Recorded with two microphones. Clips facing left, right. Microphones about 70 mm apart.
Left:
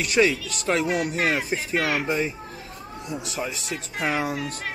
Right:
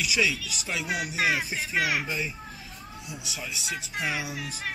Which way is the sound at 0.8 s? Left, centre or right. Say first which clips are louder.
Left 4 dB; centre.